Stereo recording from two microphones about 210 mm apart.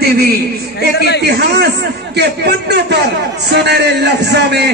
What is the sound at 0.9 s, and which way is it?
Speech, 55° left (ahead or behind).